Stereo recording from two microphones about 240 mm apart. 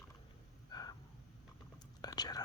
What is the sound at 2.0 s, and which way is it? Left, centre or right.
Whispering, centre.